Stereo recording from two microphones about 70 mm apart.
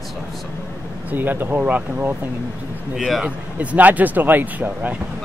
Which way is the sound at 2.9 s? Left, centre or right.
Centre.